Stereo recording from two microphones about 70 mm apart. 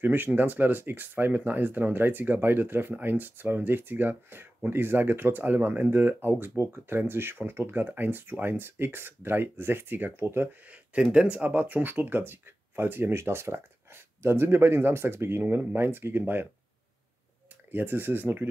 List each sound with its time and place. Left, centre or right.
0.0 s speech: right
10.6 s speech: centre
17.6 s speech: right